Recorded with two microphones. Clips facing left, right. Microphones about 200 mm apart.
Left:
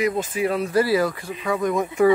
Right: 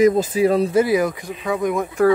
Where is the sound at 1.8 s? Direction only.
5° left (ahead or behind).